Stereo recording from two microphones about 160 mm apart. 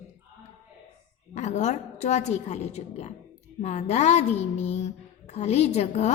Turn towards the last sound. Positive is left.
turn(degrees=45)  # may be behind; listen again after turning